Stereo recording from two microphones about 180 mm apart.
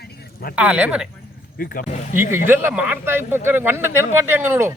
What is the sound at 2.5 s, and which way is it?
Speech, 10° right (ahead or behind).